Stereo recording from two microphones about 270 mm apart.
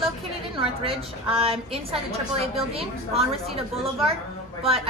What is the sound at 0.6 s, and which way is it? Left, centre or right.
A woman's voice, right.